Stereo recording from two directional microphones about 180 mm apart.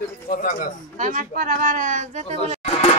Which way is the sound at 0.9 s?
50° right (ahead or behind).